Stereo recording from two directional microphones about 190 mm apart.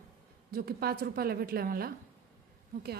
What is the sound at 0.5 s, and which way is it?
A woman's voice, 55° right (ahead or behind).